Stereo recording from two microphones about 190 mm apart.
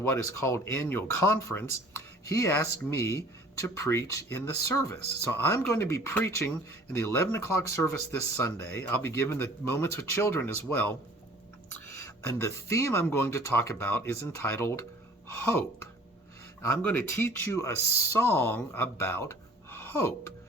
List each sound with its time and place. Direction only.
0.0 s speech: 15° left (ahead or behind)
12.2 s speech: 15° left (ahead or behind)